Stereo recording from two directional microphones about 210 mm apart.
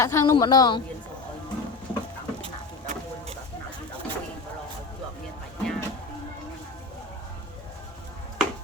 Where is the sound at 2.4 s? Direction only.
25° right (ahead or behind).